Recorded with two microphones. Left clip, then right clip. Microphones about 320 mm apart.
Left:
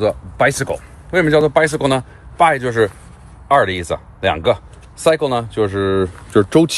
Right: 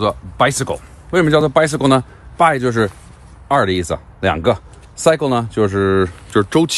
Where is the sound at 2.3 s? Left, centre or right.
Right.